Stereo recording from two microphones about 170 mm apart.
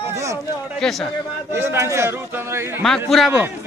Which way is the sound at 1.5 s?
15° right (ahead or behind).